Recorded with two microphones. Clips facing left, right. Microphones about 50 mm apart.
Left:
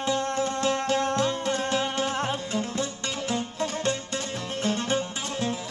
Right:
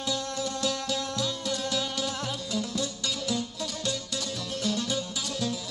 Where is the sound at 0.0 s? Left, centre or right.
Left.